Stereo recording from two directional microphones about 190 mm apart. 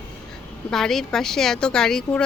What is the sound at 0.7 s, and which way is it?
Speech, centre (ahead or behind).